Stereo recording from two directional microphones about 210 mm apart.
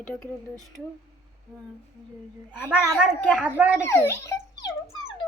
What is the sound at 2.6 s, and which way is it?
Speech, 10° right (ahead or behind).